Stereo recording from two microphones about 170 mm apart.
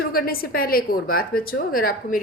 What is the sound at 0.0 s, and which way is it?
A woman's voice, 60° left (ahead or behind).